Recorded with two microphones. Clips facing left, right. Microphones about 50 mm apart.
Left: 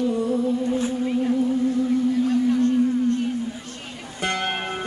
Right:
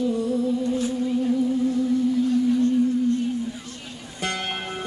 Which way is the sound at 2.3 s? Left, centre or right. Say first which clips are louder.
Left 1 dB; left.